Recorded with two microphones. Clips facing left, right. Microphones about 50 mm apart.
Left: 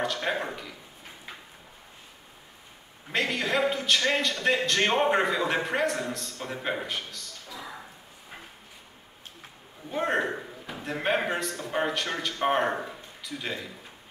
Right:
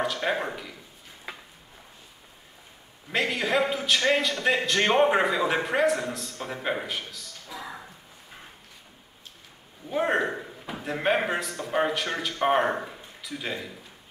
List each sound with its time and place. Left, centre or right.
0.0 s a man's voice: centre
1.3 s drawer open or close: right
3.1 s a man's voice: centre
7.4 s a sound: centre
9.8 s a man's voice: centre